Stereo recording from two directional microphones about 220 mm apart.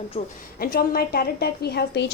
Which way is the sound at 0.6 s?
45° left (ahead or behind).